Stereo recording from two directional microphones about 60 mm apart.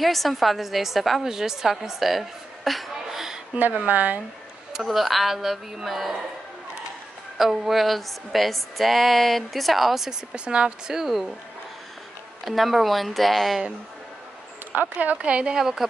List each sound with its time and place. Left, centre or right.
0.0 s a woman's voice: centre
3.8 s speech: right
4.7 s speech: centre
7.3 s speech: centre
10.3 s speech: centre
12.4 s speech: centre
14.7 s speech: right; by 15.9 s centre